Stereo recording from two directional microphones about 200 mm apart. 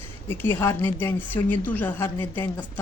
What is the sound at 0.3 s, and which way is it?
A woman's voice, 10° left (ahead or behind).